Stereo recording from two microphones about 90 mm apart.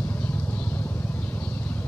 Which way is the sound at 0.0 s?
20° left (ahead or behind).